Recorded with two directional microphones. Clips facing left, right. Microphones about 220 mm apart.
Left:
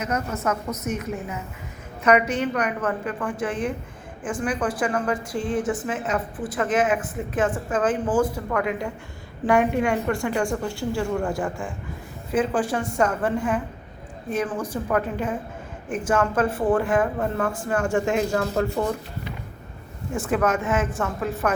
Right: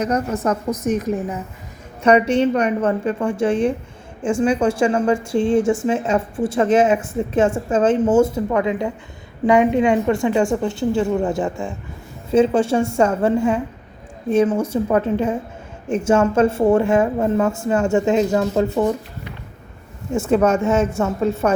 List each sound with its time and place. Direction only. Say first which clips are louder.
0.0 s a woman's voice: right 6 dB; 35° right (ahead or behind)
20.1 s a woman's voice: right 6 dB; 25° right (ahead or behind)